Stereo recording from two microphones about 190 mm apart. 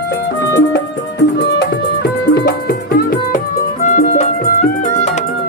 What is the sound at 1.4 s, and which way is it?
Music, 60° left (ahead or behind).